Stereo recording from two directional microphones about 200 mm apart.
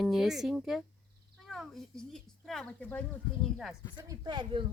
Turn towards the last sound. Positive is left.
turn(degrees=-25)  # may be behind; listen again after turning